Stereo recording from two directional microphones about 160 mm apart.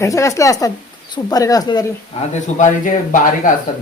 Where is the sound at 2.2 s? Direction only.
40° left (ahead or behind).